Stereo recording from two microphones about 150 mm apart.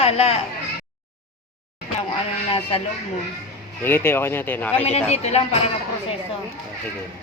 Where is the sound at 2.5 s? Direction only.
35° left (ahead or behind).